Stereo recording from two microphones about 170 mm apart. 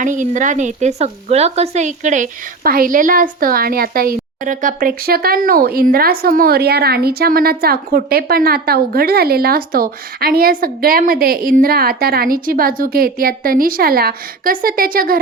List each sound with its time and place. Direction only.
0.0 s speech: 50° right (ahead or behind)